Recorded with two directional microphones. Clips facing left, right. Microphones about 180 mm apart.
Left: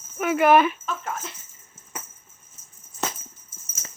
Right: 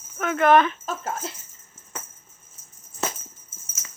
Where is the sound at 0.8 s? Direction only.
35° right (ahead or behind).